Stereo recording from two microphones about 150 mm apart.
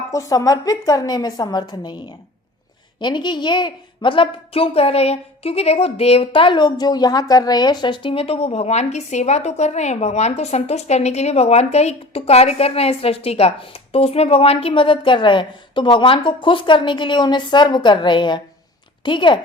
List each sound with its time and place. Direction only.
0.1 s a woman's voice: 20° left (ahead or behind)
3.0 s a woman's voice: 30° left (ahead or behind)